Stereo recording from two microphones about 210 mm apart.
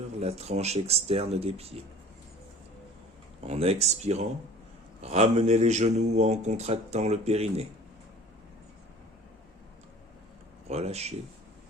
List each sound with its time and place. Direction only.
0.2 s speech: 30° right (ahead or behind)
3.4 s speech: 30° right (ahead or behind)
10.7 s speech: 30° right (ahead or behind)